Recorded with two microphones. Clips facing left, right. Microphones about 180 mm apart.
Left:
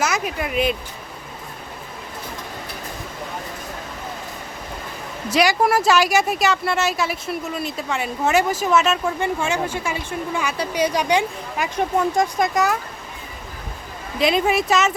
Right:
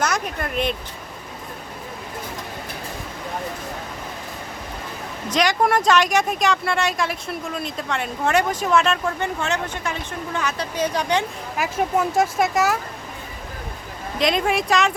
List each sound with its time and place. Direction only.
0.0 s speech: 5° left (ahead or behind)
5.3 s speech: 5° left (ahead or behind)
11.5 s speech: 5° right (ahead or behind)
14.2 s speech: 5° left (ahead or behind)